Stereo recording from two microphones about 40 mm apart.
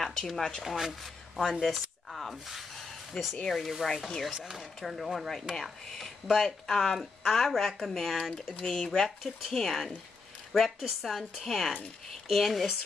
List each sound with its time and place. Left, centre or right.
0.0 s speech: centre
0.7 s speech: centre
1.6 s a sound: centre
2.3 s speech: centre
4.3 s speech: centre
4.8 s speech: centre